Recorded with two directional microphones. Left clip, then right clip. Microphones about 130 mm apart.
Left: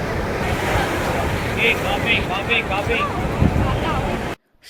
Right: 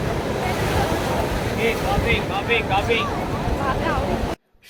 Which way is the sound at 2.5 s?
35° right (ahead or behind).